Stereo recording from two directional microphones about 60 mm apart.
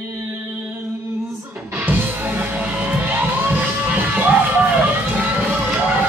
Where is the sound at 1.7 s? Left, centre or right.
Right.